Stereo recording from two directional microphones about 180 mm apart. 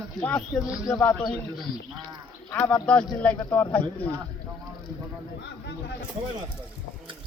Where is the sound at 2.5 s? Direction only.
5° left (ahead or behind).